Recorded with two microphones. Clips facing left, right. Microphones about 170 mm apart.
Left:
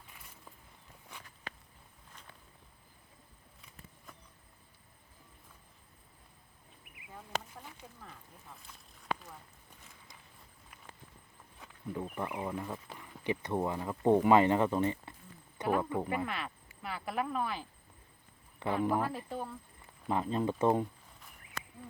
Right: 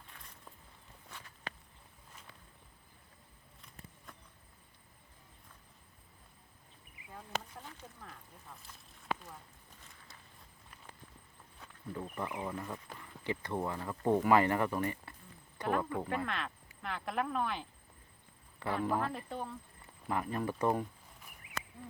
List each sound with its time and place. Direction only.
3.6 s a sound: centre (ahead or behind)
7.1 s speech: 5° left (ahead or behind)
11.6 s speech: 10° left (ahead or behind)
15.6 s speech: 5° left (ahead or behind)
18.6 s speech: 15° left (ahead or behind)
20.1 s speech: 20° left (ahead or behind)